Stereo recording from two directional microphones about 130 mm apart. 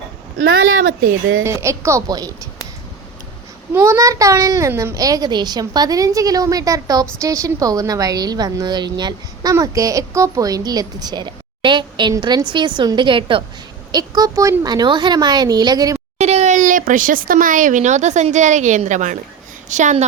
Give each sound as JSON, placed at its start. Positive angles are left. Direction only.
{"t": 1.5, "sound": "a child's voice", "side_deg": -20}
{"t": 3.8, "sound": "a child's voice", "side_deg": -20}
{"t": 16.1, "sound": "speech", "side_deg": -55}